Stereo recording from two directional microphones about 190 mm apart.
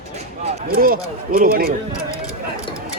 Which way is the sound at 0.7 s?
50° right (ahead or behind).